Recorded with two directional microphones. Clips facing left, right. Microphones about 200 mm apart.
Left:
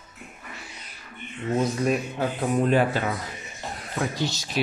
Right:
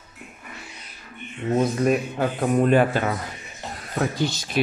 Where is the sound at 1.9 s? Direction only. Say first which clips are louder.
Right 3 dB; 55° right (ahead or behind).